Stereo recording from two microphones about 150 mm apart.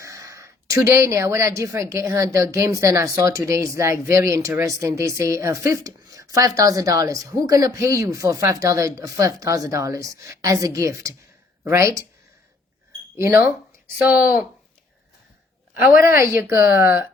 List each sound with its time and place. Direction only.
0.0 s speech: 20° right (ahead or behind)
13.1 s a woman's voice: 20° right (ahead or behind)
16.0 s a woman's voice: 20° right (ahead or behind)